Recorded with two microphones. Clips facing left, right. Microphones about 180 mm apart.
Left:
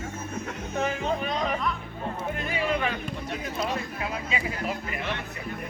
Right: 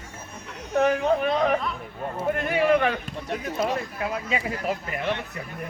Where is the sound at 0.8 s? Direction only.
60° right (ahead or behind).